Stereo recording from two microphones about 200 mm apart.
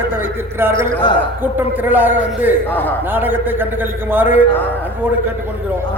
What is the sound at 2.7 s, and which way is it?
Speech, 10° left (ahead or behind).